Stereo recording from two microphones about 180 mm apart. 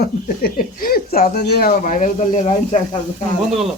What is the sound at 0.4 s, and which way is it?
Speech, 55° left (ahead or behind).